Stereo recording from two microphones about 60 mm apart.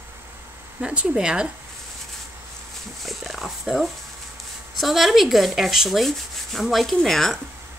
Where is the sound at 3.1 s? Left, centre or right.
Centre.